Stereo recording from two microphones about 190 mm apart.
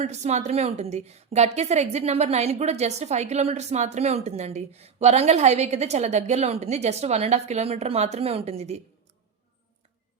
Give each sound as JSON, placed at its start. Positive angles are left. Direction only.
{"t": 0.0, "sound": "a woman's voice", "side_deg": -35}